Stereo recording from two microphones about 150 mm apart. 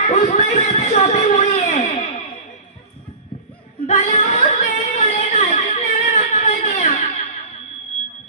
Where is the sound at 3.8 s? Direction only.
50° left (ahead or behind).